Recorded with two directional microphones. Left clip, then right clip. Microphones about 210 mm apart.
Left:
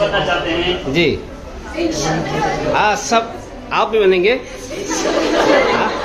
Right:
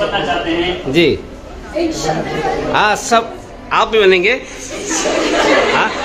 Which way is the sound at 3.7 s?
5° right (ahead or behind).